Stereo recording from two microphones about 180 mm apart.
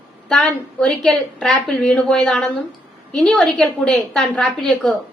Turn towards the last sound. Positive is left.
turn(degrees=5)  # may be behind; listen again after turning